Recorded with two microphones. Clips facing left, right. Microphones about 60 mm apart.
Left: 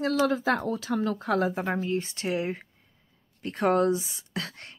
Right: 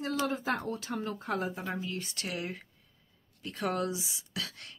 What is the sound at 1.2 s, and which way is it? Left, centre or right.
Speech, left.